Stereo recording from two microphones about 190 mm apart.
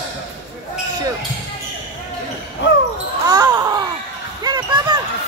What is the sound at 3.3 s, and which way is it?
Basketball bounce, 15° right (ahead or behind).